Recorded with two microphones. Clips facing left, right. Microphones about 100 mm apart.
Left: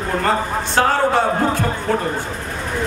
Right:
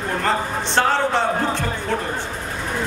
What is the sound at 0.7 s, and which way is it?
Speech, 5° left (ahead or behind).